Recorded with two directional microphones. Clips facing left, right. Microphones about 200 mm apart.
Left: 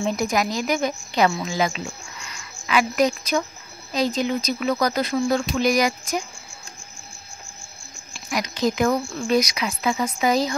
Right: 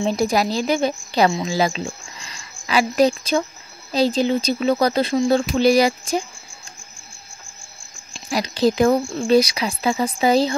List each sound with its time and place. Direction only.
0.0 s a woman's voice: 30° right (ahead or behind)
8.1 s a woman's voice: 30° right (ahead or behind)